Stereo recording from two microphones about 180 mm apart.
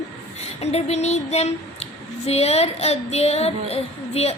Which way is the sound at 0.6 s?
35° left (ahead or behind).